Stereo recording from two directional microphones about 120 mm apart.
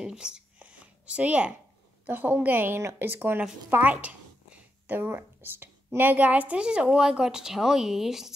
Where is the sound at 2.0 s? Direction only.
15° right (ahead or behind).